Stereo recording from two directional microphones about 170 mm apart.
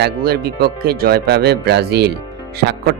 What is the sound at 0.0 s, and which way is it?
Speech, 65° right (ahead or behind).